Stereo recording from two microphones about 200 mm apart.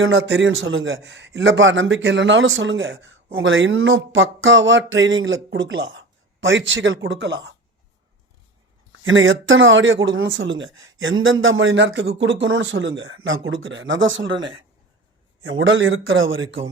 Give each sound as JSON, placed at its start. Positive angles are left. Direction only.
{"t": 0.1, "sound": "speech", "side_deg": -65}
{"t": 9.0, "sound": "speech", "side_deg": -75}
{"t": 15.4, "sound": "speech", "side_deg": -75}